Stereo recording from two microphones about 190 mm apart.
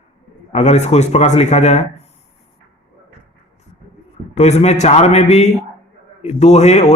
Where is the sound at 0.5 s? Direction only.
35° left (ahead or behind).